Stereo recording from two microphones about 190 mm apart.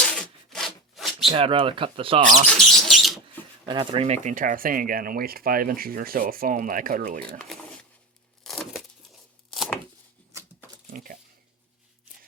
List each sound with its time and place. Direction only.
0.0 s zipper: 5° left (ahead or behind)
1.3 s speech: 25° right (ahead or behind)
2.6 s speech: centre (ahead or behind)
3.7 s speech: 25° right (ahead or behind); by 7.2 s 45° right (ahead or behind)
7.4 s a sound: 5° left (ahead or behind)
8.4 s tearing: centre (ahead or behind)
10.8 s a sound: 50° right (ahead or behind)